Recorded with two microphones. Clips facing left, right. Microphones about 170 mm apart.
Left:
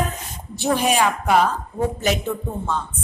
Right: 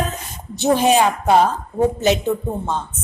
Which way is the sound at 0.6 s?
25° right (ahead or behind).